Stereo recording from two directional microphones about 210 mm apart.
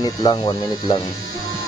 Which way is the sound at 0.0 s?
20° left (ahead or behind).